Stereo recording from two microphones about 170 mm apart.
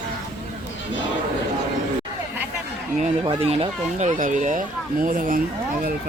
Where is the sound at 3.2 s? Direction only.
35° right (ahead or behind); by 5.4 s 55° right (ahead or behind).